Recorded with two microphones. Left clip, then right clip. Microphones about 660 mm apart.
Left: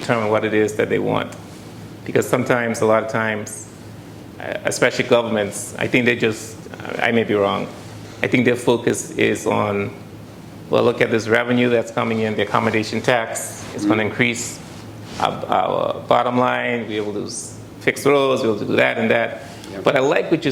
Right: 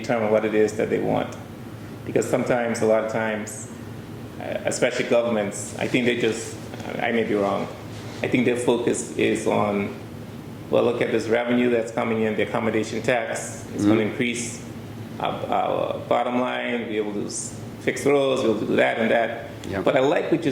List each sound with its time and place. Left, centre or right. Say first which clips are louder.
0.1 s speech: left 3 dB; left
10.7 s speech: left 4 dB; left